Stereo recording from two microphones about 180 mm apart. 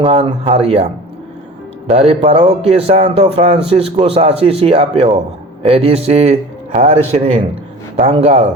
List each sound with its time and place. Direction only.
0.0 s a man's voice: 25° right (ahead or behind)
1.9 s a man's voice: 35° right (ahead or behind)